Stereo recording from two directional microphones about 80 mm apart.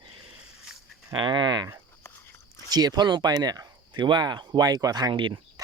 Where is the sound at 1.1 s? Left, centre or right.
Right.